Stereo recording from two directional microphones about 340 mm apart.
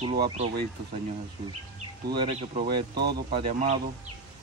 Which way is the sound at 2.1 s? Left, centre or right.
Centre.